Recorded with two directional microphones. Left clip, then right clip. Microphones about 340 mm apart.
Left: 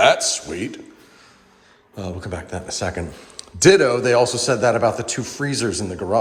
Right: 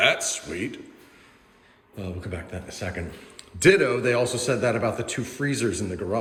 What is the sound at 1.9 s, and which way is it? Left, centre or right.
A man's voice, centre.